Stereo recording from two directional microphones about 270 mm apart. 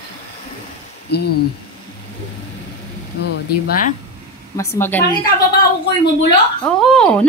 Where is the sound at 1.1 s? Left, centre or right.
Left.